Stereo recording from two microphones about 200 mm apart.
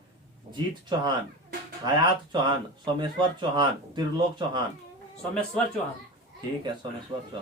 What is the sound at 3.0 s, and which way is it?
Speech, 20° right (ahead or behind).